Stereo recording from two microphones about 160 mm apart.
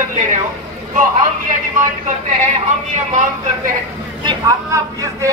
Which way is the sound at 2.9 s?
50° right (ahead or behind).